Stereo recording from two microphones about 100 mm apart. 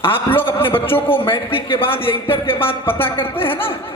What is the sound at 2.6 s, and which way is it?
Speech, 20° left (ahead or behind).